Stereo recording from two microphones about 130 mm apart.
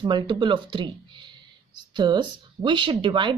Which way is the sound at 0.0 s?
35° right (ahead or behind).